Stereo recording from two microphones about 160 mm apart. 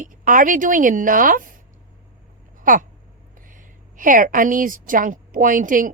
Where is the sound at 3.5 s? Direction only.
55° right (ahead or behind).